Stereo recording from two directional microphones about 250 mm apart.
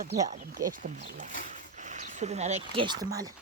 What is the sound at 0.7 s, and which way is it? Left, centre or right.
Speech, right.